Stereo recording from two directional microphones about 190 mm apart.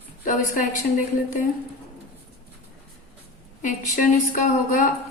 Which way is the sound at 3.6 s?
40° left (ahead or behind).